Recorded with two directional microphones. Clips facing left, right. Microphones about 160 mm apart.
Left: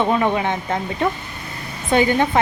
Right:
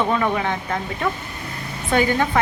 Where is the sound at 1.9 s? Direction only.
20° left (ahead or behind).